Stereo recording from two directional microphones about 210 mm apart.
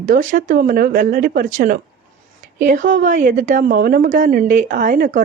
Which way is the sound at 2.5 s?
40° right (ahead or behind).